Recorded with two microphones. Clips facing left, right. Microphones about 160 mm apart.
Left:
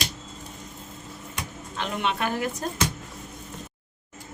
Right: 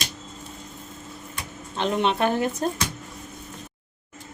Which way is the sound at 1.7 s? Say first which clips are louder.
Right 5 dB; 25° right (ahead or behind).